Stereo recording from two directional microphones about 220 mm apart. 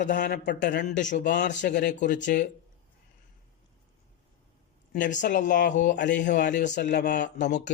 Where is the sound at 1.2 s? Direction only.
50° left (ahead or behind).